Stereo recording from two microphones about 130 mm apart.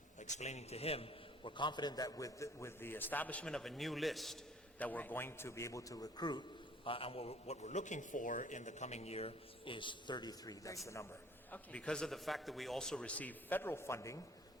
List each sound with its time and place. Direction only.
0.2 s a man's voice: 65° left (ahead or behind); by 4.4 s centre (ahead or behind)
4.8 s a man's voice: 10° left (ahead or behind); by 6.4 s 35° left (ahead or behind)
6.8 s a man's voice: 45° left (ahead or behind); by 10.8 s 25° left (ahead or behind)
11.5 s a man's voice: 10° left (ahead or behind)